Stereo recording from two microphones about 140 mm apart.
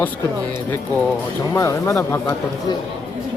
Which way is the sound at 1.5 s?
20° left (ahead or behind).